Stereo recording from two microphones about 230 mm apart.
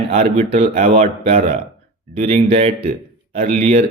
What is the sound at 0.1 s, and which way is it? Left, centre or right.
A man's voice, right.